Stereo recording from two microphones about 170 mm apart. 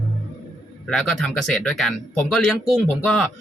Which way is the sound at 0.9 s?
Centre (ahead or behind).